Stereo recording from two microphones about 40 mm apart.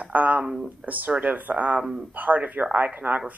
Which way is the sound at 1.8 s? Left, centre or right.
Centre.